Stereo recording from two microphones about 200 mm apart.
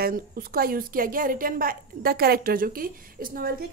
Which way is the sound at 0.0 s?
45° right (ahead or behind).